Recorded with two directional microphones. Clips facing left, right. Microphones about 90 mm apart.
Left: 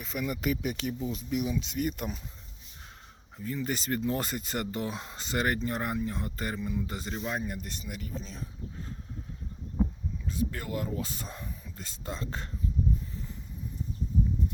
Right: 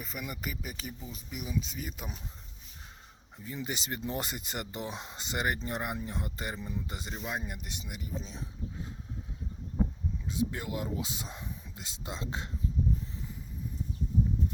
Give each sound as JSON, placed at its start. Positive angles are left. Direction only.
{"t": 0.0, "sound": "speech", "side_deg": -5}
{"t": 3.3, "sound": "speech", "side_deg": -15}
{"t": 6.2, "sound": "speech", "side_deg": -15}
{"t": 6.6, "sound": "speech", "side_deg": -30}
{"t": 6.8, "sound": "speech", "side_deg": -15}
{"t": 10.3, "sound": "speech", "side_deg": -20}